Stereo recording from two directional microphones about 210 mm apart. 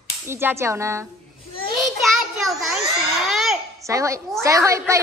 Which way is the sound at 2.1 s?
Centre (ahead or behind).